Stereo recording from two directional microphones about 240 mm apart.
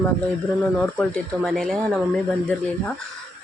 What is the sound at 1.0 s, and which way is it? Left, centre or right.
Speech, centre.